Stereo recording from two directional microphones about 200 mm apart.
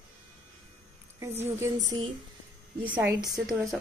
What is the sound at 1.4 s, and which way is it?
Speech, 15° right (ahead or behind).